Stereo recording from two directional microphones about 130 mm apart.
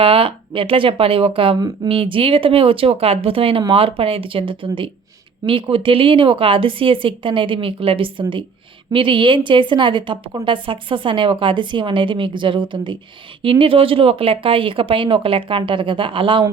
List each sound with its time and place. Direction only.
0.0 s a woman's voice: 45° right (ahead or behind)